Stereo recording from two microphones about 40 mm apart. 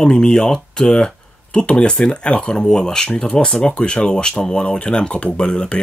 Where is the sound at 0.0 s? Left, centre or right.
Left.